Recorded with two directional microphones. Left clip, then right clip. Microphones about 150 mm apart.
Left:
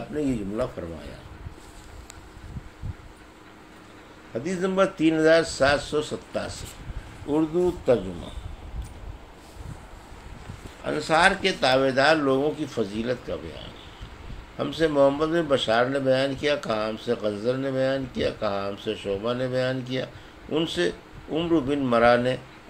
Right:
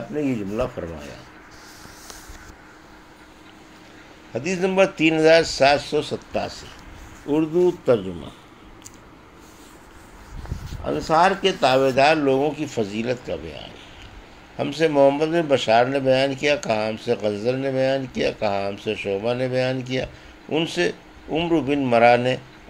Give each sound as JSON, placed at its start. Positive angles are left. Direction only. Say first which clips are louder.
{"t": 0.1, "sound": "speech", "louder": "right 3 dB", "side_deg": -25}
{"t": 4.3, "sound": "speech", "louder": "right 4 dB", "side_deg": -30}
{"t": 7.2, "sound": "speech", "louder": "right 4 dB", "side_deg": -10}
{"t": 10.9, "sound": "speech", "louder": "right 2 dB", "side_deg": -25}